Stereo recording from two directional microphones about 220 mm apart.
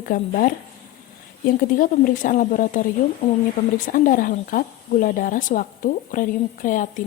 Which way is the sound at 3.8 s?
35° left (ahead or behind).